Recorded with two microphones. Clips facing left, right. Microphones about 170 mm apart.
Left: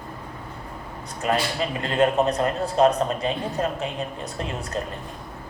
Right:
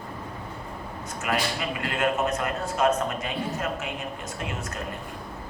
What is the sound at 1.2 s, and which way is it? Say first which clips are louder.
A man's voice: left 4 dB; 30° left (ahead or behind).